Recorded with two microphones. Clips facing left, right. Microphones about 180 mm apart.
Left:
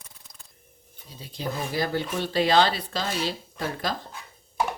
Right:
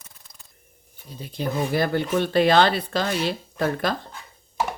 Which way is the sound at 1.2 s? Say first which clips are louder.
Right 5 dB; 55° right (ahead or behind).